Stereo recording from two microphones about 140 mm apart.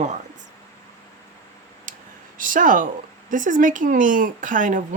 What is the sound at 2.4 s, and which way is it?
Speech, 75° right (ahead or behind).